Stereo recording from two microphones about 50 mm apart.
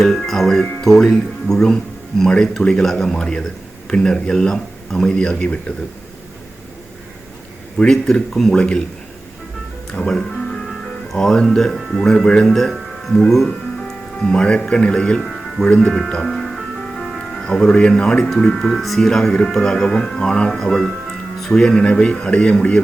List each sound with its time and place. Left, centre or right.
0.0 s speech: centre
3.2 s speech: centre
7.9 s speech: centre
8.5 s speech: left
9.9 s speech: centre
10.4 s music: centre
11.4 s speech: centre
15.9 s speech: centre
16.2 s music: centre
17.3 s speech: centre